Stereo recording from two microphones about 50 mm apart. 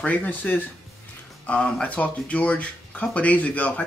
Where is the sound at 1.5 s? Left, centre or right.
Left.